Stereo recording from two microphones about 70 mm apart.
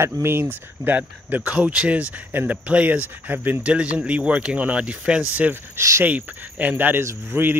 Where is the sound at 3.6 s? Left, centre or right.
Centre.